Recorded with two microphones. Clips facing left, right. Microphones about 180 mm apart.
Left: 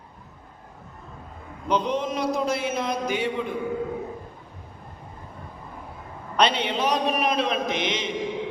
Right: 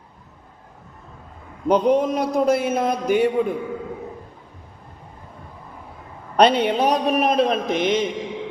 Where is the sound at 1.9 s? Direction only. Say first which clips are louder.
Right 5 dB; 55° right (ahead or behind).